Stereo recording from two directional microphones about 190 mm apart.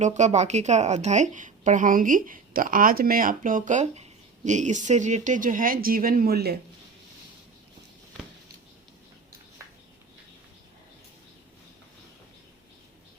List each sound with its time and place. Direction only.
0.0 s a woman's voice: 40° right (ahead or behind); by 6.6 s 55° right (ahead or behind)